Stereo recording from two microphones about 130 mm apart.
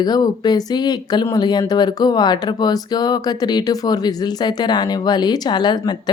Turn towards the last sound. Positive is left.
turn(degrees=35)  # may be behind; listen again after turning